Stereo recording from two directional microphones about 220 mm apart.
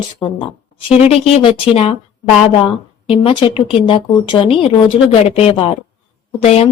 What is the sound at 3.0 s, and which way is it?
Speech, 25° left (ahead or behind).